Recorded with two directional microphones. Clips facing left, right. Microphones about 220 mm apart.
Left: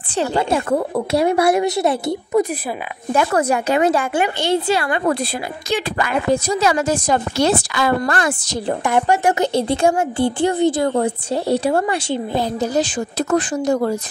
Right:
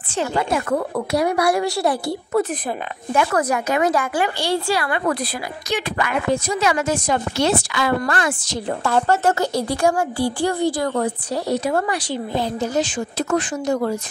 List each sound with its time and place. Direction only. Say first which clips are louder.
0.1 s speech: left 3 dB; 30° left (ahead or behind)
3.1 s a woman's voice: left 2 dB; 30° left (ahead or behind)
8.8 s a woman's voice: left 1 dB; 15° left (ahead or behind); by 13.9 s 35° left (ahead or behind)